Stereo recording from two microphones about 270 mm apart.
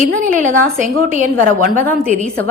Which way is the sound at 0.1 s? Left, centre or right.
Right.